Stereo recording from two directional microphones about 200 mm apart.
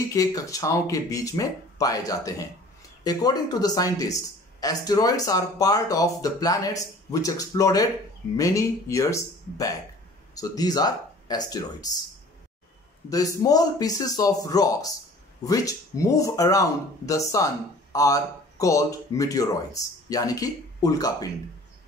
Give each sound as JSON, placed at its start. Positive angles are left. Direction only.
{"t": 0.1, "sound": "speech", "side_deg": 15}
{"t": 13.1, "sound": "speech", "side_deg": 15}